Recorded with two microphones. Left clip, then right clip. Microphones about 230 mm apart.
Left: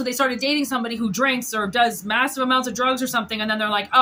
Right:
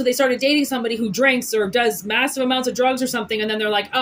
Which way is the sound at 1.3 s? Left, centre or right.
Left.